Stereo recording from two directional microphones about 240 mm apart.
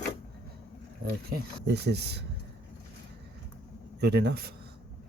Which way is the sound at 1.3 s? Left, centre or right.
Right.